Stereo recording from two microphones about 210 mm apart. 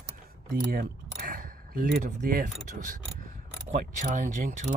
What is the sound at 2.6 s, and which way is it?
Speech, 40° right (ahead or behind).